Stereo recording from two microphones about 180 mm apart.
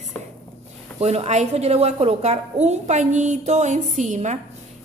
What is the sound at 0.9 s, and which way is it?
A woman's voice, 35° right (ahead or behind).